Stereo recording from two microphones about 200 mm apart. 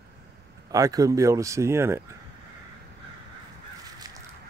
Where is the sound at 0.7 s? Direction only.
15° right (ahead or behind).